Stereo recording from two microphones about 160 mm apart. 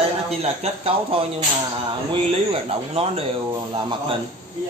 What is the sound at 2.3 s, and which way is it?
Speech, 35° right (ahead or behind).